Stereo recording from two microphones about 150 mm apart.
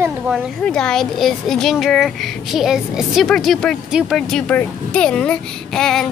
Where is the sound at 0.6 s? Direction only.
5° left (ahead or behind).